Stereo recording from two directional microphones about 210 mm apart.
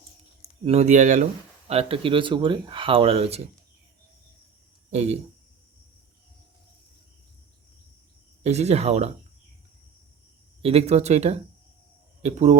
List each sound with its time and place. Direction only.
0.6 s speech: 30° right (ahead or behind)
4.9 s speech: 30° right (ahead or behind)
8.4 s speech: 30° right (ahead or behind)
10.6 s speech: 30° right (ahead or behind)